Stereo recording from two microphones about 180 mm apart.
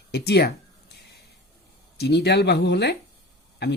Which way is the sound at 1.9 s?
65° left (ahead or behind).